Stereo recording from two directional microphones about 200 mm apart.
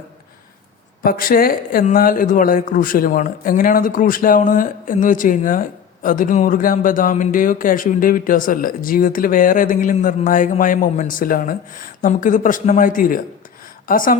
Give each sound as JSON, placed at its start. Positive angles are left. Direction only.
{"t": 1.0, "sound": "speech", "side_deg": 45}